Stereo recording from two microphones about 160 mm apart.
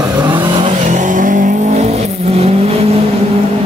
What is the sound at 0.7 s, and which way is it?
Vehicle, 50° right (ahead or behind).